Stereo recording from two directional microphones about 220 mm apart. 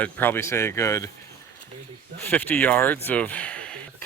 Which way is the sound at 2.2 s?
10° left (ahead or behind).